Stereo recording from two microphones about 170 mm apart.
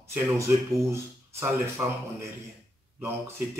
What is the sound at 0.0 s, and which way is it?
Speech, 15° right (ahead or behind).